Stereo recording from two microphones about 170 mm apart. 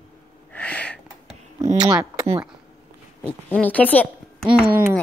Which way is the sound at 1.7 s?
20° right (ahead or behind).